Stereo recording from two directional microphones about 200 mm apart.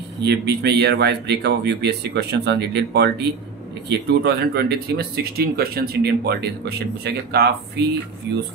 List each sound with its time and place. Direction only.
0.2 s speech: 55° right (ahead or behind)